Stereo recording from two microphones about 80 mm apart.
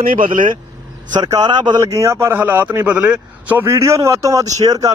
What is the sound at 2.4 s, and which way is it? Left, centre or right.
Speech, right.